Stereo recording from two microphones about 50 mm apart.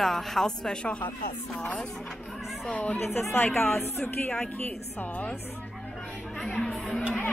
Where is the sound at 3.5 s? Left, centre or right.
Left.